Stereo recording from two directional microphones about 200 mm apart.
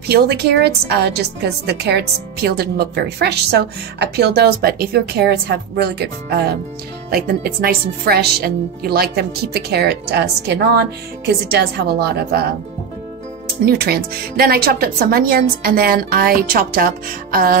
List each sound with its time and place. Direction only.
0.1 s a woman's voice: 55° right (ahead or behind)
13.7 s a woman's voice: 50° right (ahead or behind)